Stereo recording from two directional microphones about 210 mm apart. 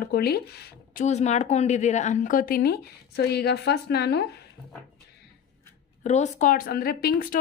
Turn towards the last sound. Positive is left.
turn(degrees=45)  # may be behind; listen again after turning